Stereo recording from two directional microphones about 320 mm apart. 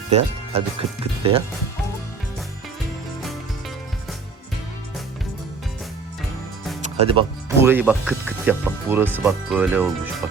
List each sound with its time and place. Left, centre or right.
0.1 s speech: centre
6.9 s speech: centre